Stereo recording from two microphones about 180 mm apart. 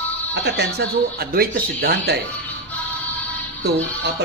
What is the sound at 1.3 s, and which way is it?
Speech, 55° right (ahead or behind).